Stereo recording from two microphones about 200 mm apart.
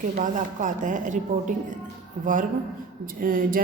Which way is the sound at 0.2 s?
40° right (ahead or behind).